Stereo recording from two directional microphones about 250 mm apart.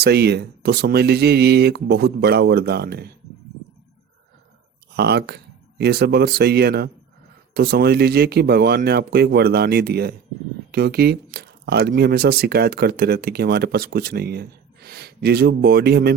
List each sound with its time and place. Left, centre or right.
0.0 s speech: right
4.9 s speech: right